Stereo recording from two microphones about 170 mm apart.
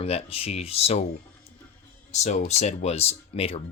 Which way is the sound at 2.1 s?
45° left (ahead or behind).